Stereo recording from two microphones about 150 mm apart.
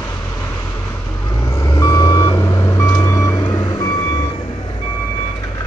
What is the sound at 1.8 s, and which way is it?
Reversing beeps, 25° left (ahead or behind).